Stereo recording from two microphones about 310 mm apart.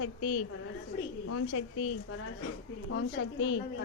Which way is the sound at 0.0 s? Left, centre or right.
Left.